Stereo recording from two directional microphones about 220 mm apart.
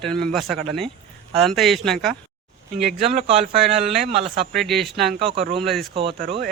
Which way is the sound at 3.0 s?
25° right (ahead or behind).